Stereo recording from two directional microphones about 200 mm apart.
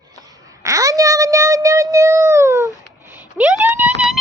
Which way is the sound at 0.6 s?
15° right (ahead or behind).